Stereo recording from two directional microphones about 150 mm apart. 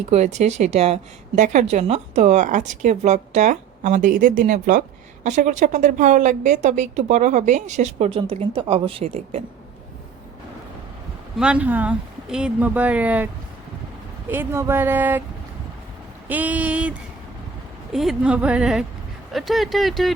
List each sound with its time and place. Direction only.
0.1 s a woman's voice: 50° right (ahead or behind)
11.3 s speech: 5° right (ahead or behind)
16.3 s speech: 10° right (ahead or behind)
17.9 s speech: centre (ahead or behind)